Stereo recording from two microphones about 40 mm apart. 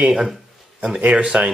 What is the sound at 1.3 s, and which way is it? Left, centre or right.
Speech, right.